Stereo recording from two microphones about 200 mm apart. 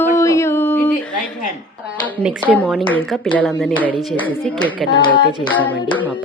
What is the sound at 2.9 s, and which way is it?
A woman's voice, 5° left (ahead or behind).